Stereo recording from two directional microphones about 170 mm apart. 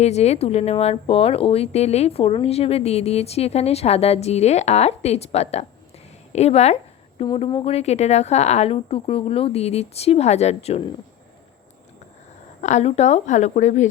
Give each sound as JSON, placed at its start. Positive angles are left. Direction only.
{"t": 0.0, "sound": "speech", "side_deg": 40}
{"t": 12.6, "sound": "speech", "side_deg": 40}